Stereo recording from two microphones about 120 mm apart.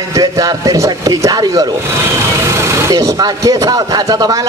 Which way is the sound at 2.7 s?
25° right (ahead or behind).